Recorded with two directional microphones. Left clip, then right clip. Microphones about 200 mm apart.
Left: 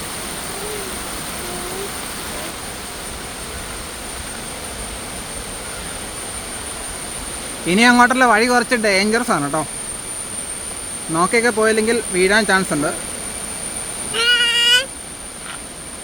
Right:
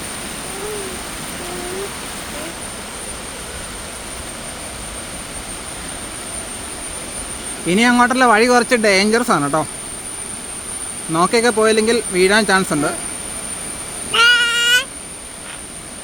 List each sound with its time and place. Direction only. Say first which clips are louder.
7.7 s speech: left 2 dB; 5° right (ahead or behind)
11.1 s speech: right 1 dB; 15° right (ahead or behind)
14.1 s child singing: right 3 dB; 35° right (ahead or behind)